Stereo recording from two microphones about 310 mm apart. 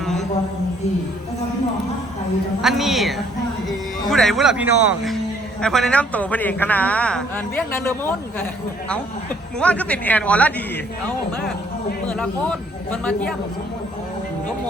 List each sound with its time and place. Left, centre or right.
0.0 s a sound: centre
2.6 s a man's voice: centre
9.6 s a man's voice: centre
12.0 s a man's voice: centre